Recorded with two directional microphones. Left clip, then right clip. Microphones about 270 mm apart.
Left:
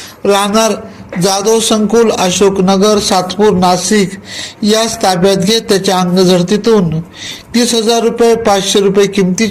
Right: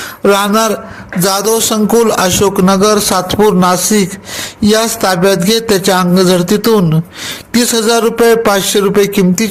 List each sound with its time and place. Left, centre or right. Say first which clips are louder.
0.2 s a man's voice: even; right